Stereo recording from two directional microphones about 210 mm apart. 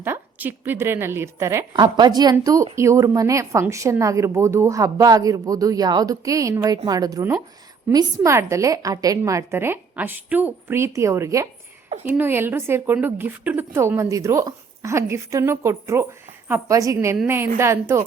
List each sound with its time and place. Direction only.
0.0 s a woman's voice: 10° right (ahead or behind)